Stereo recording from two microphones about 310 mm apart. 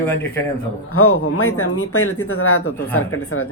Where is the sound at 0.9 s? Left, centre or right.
Left.